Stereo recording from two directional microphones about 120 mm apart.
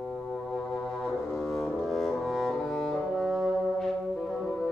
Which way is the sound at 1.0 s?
5° left (ahead or behind).